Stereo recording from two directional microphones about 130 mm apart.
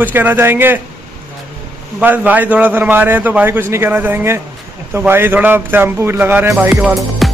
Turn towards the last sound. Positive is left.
turn(degrees=0)  # may be behind; listen again after turning